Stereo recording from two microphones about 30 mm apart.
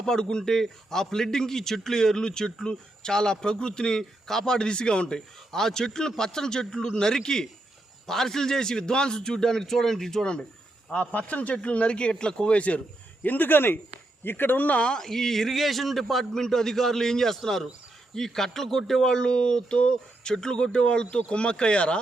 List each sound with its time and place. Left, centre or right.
0.0 s a man's voice: left
10.9 s a man's voice: left
11.9 s speech: left
13.2 s speech: left
14.5 s speech: left
14.8 s a man's voice: centre
16.3 s a man's voice: centre
19.0 s a man's voice: left